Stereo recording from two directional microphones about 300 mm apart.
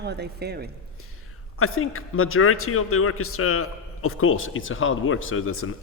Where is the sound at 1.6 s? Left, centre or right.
Left.